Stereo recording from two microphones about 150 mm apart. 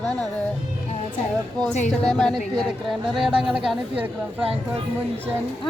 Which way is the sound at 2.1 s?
Centre (ahead or behind).